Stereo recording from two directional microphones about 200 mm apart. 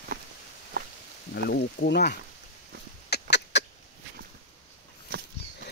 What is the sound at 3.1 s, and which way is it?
Duck, 55° left (ahead or behind).